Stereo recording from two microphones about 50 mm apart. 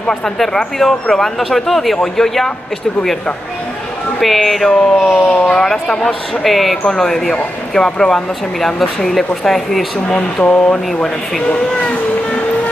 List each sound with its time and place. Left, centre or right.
0.0 s speech: centre
4.2 s speech: centre
10.0 s speech: left